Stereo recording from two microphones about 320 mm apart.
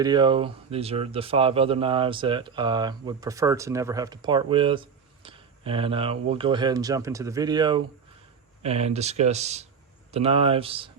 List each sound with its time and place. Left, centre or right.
0.0 s speech: centre